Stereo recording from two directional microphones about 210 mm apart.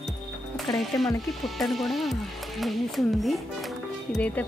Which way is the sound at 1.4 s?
Centre (ahead or behind).